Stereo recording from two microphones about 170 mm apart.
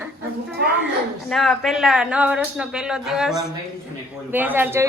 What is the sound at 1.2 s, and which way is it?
Speech, centre (ahead or behind).